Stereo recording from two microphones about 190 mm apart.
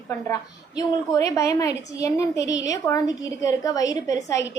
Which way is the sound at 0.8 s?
15° left (ahead or behind).